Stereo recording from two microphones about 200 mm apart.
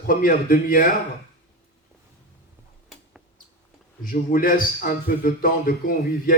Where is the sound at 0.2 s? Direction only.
45° left (ahead or behind).